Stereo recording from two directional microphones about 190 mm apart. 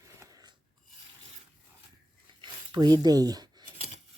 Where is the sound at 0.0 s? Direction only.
15° right (ahead or behind).